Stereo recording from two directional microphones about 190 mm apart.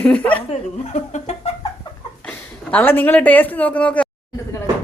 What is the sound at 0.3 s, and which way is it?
Speech, 35° left (ahead or behind).